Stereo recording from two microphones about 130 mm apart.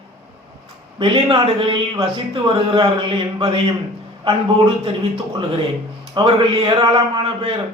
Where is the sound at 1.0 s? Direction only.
45° right (ahead or behind).